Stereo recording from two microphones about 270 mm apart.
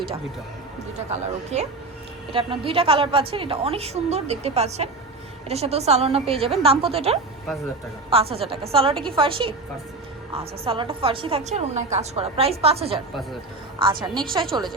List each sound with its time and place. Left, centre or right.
1.5 s a woman's voice: right
14.1 s a woman's voice: centre
14.3 s speech: centre